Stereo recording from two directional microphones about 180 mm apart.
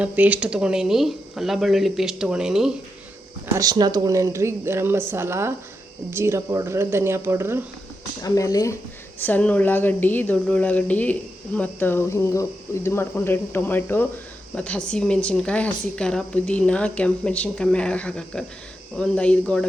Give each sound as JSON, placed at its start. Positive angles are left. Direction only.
{"t": 0.0, "sound": "a woman's voice", "side_deg": -5}
{"t": 3.6, "sound": "speech", "side_deg": -20}
{"t": 8.2, "sound": "a woman's voice", "side_deg": 20}